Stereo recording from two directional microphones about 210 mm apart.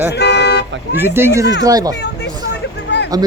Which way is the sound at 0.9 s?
10° right (ahead or behind).